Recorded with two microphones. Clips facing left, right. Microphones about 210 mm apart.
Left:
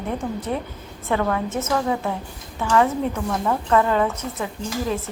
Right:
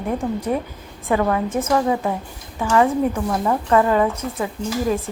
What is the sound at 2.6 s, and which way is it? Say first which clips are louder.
A woman's voice: right 2 dB; 10° right (ahead or behind).